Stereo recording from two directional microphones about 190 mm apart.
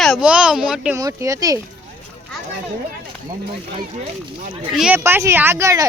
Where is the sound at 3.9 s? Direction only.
35° right (ahead or behind).